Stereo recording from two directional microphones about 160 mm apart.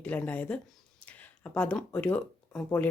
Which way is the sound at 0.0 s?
10° left (ahead or behind).